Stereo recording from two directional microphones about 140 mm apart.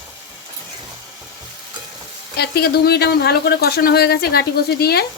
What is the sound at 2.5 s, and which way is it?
Speech, 90° left.